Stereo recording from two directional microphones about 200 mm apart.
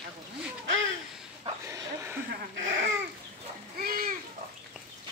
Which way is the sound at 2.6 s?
70° right (ahead or behind).